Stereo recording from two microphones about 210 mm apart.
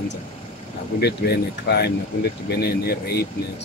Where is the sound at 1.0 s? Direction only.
50° left (ahead or behind).